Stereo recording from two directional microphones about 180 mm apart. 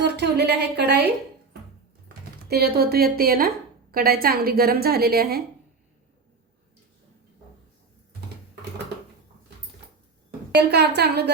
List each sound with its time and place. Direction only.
0.0 s a woman's voice: 65° right (ahead or behind)
2.0 s a woman's voice: 60° right (ahead or behind)
10.6 s a woman's voice: 65° right (ahead or behind)